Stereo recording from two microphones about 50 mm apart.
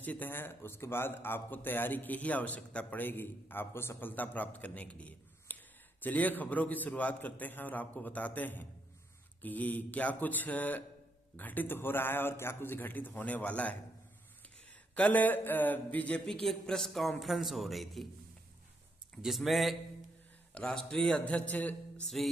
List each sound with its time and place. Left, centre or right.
0.0 s a man's voice: left
4.1 s a man's voice: left
5.5 s a sound: left
6.0 s a man's voice: left
15.0 s a man's voice: left
16.3 s a man's voice: centre
19.2 s a man's voice: centre
20.5 s a man's voice: centre
22.2 s a man's voice: centre